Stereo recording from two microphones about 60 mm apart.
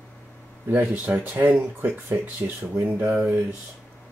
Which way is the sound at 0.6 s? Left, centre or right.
Right.